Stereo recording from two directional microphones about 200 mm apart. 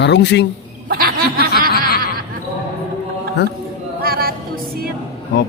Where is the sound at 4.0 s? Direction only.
50° right (ahead or behind).